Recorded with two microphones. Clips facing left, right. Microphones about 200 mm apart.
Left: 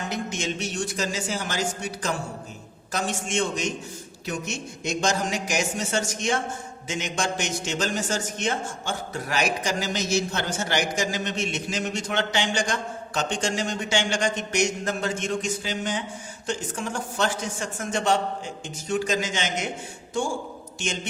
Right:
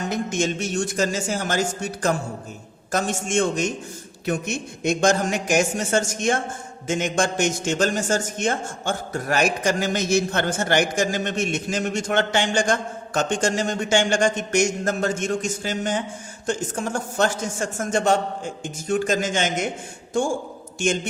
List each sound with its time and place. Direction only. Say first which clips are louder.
0.1 s a man's voice: right 8 dB; 50° right (ahead or behind)
20.7 s a man's voice: right 8 dB; 50° right (ahead or behind)